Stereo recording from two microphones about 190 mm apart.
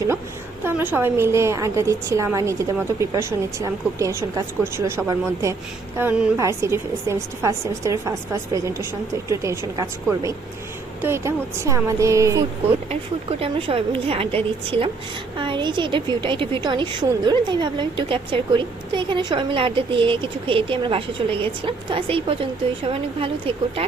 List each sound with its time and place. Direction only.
0.6 s a woman's voice: 10° right (ahead or behind)
13.4 s a woman's voice: 30° right (ahead or behind)